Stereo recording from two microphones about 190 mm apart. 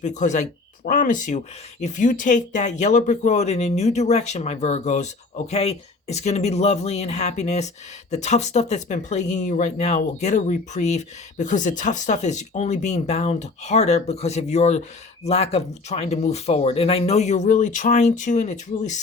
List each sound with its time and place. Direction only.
0.0 s speech: 40° left (ahead or behind)